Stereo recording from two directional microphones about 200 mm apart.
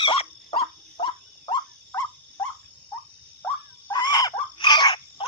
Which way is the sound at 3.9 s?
20° left (ahead or behind).